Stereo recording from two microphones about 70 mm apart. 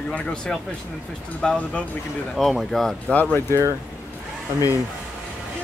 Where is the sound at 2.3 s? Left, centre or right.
Centre.